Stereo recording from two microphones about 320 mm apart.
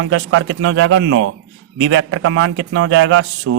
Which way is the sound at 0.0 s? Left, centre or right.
Right.